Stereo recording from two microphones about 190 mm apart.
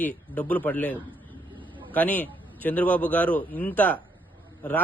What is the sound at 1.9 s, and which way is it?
A man's voice, 10° left (ahead or behind).